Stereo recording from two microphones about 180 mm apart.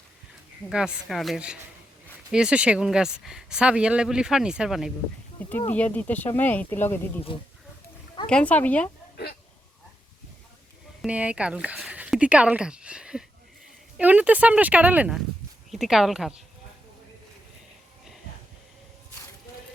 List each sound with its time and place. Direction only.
0.7 s speech: centre (ahead or behind)
5.5 s speech: 10° left (ahead or behind)
7.3 s speech: 30° left (ahead or behind)
8.3 s speech: 5° left (ahead or behind)
11.0 s speech: 5° right (ahead or behind)